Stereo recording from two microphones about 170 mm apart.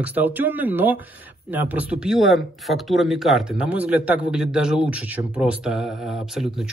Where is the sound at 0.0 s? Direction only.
10° right (ahead or behind).